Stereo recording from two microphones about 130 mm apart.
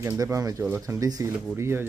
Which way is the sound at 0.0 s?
20° right (ahead or behind).